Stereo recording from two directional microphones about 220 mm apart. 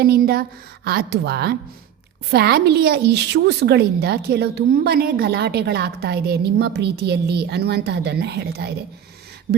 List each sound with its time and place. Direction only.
0.0 s a woman's voice: 45° right (ahead or behind)